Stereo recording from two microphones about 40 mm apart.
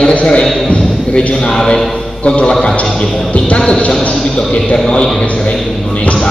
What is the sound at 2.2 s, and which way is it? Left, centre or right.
Speech, left.